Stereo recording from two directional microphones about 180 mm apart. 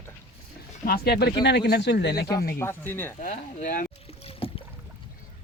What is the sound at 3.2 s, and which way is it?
Speech, 45° left (ahead or behind).